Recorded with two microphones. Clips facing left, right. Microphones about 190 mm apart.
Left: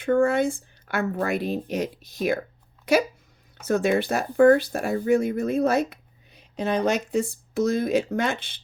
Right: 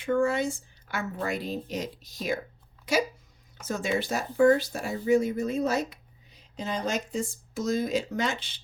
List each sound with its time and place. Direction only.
0.0 s speech: 55° left (ahead or behind)